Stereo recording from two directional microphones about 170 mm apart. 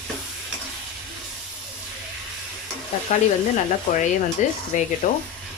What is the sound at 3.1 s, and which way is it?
Speech, 45° left (ahead or behind).